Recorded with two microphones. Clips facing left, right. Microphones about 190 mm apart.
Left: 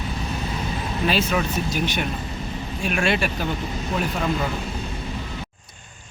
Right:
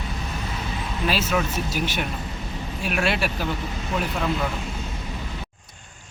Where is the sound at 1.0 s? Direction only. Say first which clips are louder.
Left 1 dB; centre (ahead or behind).